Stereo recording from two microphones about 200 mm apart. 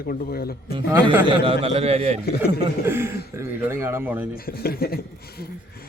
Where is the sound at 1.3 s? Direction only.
25° right (ahead or behind).